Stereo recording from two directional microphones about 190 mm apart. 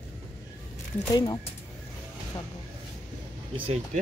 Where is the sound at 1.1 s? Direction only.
20° left (ahead or behind).